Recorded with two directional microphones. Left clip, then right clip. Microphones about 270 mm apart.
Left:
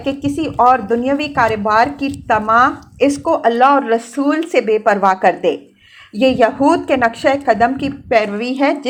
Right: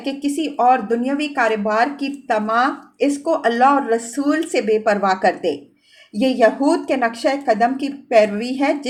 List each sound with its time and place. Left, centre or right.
0.1 s a woman's voice: centre